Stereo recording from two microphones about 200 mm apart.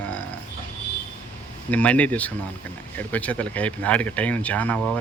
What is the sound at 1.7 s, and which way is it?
Speech, 5° left (ahead or behind).